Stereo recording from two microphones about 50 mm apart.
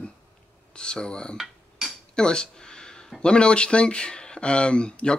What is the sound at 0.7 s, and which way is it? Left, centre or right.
Speech, centre.